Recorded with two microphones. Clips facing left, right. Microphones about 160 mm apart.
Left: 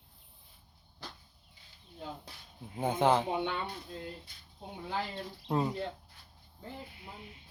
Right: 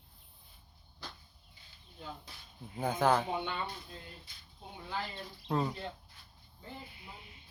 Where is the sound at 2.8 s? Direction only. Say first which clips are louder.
Left 2 dB; 25° left (ahead or behind).